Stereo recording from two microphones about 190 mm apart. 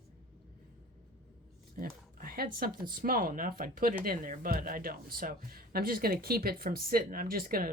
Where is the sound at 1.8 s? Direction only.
50° right (ahead or behind).